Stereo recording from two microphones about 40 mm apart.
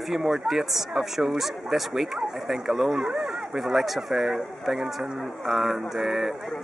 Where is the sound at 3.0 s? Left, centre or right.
Right.